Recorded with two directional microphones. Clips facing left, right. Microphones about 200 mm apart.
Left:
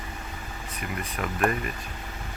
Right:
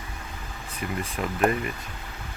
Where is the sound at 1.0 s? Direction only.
25° right (ahead or behind).